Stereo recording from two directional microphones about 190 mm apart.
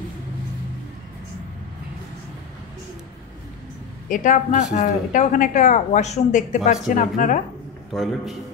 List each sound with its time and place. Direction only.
4.1 s a woman's voice: 40° left (ahead or behind)
7.9 s a man's voice: centre (ahead or behind)